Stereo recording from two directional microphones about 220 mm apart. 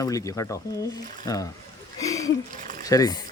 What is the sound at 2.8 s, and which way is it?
Speech, 15° left (ahead or behind).